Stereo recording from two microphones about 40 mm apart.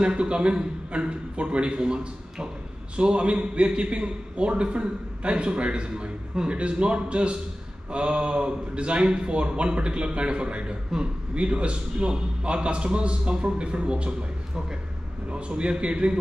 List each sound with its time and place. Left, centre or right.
0.0 s a man's voice: right
15.3 s a man's voice: right